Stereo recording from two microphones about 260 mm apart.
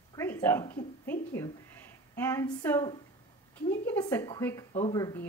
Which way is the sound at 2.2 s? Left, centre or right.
Centre.